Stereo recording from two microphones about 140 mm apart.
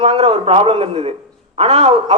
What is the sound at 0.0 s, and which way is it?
A man's voice, 45° right (ahead or behind).